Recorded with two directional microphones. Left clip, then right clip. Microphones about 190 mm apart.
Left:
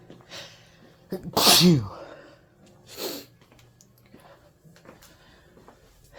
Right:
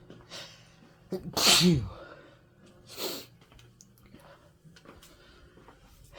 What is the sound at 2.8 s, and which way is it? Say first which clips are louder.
Sneeze: left 3 dB; 10° left (ahead or behind).